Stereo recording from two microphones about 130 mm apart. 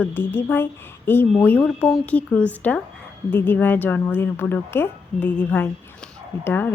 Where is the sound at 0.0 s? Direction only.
15° left (ahead or behind).